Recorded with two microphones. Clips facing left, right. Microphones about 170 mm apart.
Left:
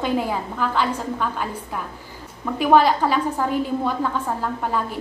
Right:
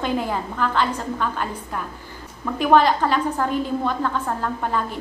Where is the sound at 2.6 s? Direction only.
5° left (ahead or behind).